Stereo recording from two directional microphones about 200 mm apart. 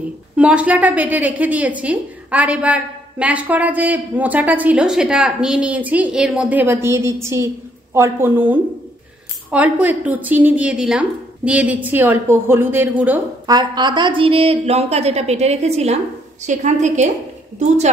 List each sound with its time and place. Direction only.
0.4 s a woman's voice: 5° right (ahead or behind)
13.5 s a woman's voice: 20° right (ahead or behind)